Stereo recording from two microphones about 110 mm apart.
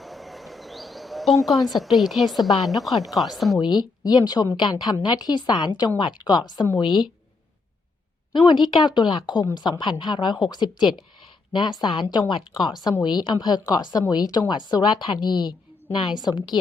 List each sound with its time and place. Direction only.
0.0 s a sound: centre (ahead or behind)
1.8 s a woman's voice: centre (ahead or behind)
3.6 s a woman's voice: 40° left (ahead or behind)
8.3 s a woman's voice: 45° left (ahead or behind)